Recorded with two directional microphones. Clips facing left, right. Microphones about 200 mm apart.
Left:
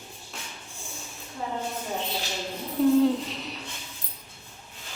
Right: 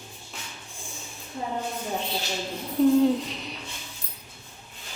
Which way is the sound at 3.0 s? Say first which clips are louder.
Right 1 dB; centre (ahead or behind).